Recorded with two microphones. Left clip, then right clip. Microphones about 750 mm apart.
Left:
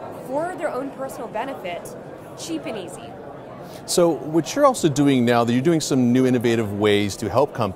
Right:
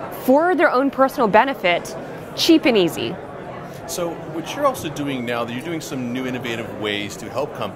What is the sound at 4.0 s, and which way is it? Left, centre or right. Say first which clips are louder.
Speech: left 8 dB; left.